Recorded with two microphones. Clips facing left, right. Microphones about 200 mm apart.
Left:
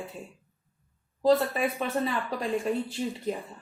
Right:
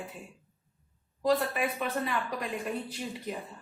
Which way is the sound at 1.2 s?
30° left (ahead or behind).